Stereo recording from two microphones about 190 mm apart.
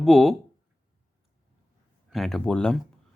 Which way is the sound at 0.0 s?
Centre (ahead or behind).